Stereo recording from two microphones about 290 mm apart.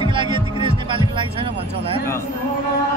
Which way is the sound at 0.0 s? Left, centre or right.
Centre.